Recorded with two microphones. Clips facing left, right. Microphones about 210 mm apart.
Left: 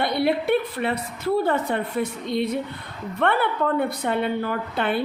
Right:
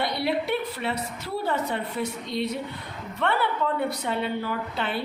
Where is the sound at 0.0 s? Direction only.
55° left (ahead or behind).